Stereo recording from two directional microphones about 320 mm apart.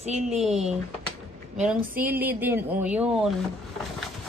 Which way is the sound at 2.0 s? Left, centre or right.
Centre.